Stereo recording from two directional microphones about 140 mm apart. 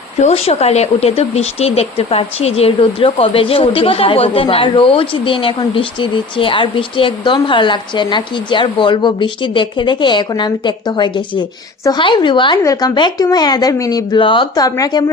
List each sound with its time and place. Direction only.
0.2 s speech: 50° left (ahead or behind)
14.6 s speech: 25° left (ahead or behind)